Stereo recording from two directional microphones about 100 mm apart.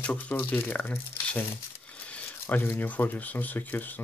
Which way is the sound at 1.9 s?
15° left (ahead or behind).